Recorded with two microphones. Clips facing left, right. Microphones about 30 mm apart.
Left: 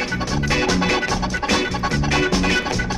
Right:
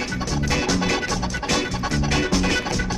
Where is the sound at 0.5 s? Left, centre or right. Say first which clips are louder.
Left 3 dB; centre.